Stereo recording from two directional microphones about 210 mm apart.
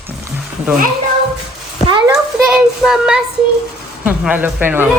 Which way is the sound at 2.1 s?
5° right (ahead or behind).